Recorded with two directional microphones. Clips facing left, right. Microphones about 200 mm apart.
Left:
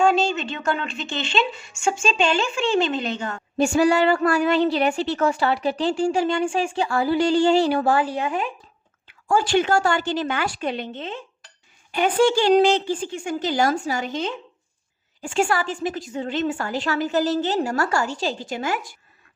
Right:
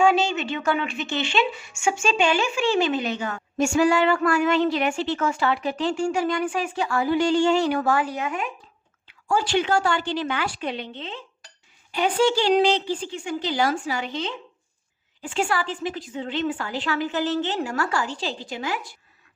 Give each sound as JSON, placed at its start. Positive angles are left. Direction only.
{"t": 0.0, "sound": "a woman's voice", "side_deg": -10}
{"t": 3.6, "sound": "a woman's voice", "side_deg": 35}
{"t": 9.2, "sound": "a woman's voice", "side_deg": 50}